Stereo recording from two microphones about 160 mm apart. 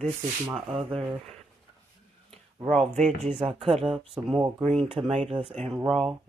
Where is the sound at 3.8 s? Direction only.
5° right (ahead or behind).